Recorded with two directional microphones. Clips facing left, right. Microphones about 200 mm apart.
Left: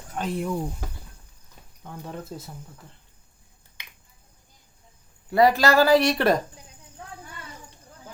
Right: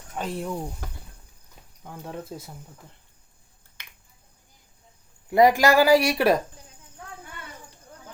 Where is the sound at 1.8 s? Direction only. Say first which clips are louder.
Even; 10° right (ahead or behind).